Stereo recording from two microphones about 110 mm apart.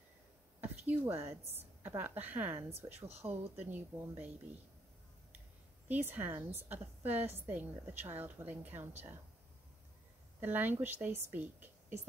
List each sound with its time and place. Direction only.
0.6 s a woman's voice: 15° right (ahead or behind)
5.9 s a woman's voice: 15° right (ahead or behind)
10.4 s a woman's voice: 15° right (ahead or behind)